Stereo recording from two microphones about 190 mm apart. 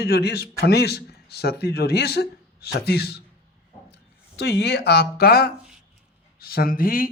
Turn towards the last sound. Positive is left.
turn(degrees=50)  # may be behind; listen again after turning